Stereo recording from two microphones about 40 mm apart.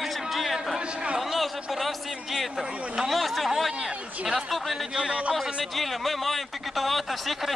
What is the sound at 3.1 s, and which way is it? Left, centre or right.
Chatter, centre.